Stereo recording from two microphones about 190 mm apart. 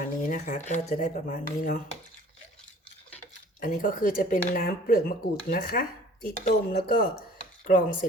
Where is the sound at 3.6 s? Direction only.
45° left (ahead or behind).